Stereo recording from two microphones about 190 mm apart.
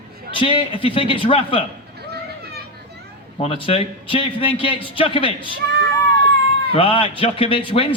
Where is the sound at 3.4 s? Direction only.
30° left (ahead or behind).